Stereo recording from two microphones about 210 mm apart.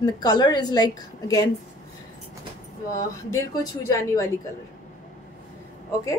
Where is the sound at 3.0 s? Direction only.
15° left (ahead or behind).